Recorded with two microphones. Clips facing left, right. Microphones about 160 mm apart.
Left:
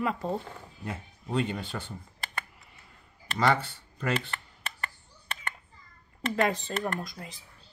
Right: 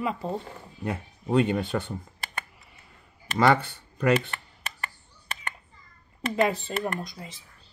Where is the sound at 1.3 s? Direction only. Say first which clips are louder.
Right 7 dB; 60° right (ahead or behind).